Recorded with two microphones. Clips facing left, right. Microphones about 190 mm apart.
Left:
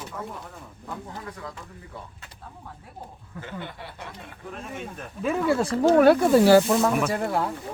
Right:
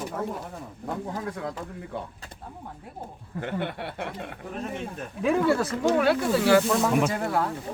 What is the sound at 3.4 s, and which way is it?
Speech, 65° right (ahead or behind).